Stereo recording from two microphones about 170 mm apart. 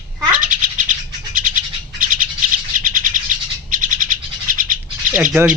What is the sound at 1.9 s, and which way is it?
Bird, 55° right (ahead or behind).